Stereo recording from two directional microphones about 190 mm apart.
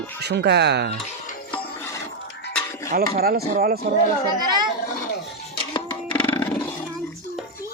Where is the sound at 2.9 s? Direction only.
50° right (ahead or behind).